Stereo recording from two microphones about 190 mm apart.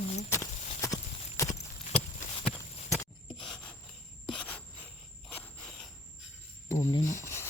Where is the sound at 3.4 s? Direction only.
5° left (ahead or behind).